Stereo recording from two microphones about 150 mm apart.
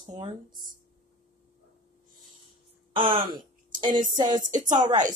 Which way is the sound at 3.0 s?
30° right (ahead or behind).